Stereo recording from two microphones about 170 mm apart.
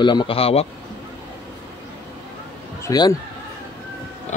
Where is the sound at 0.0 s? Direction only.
25° left (ahead or behind).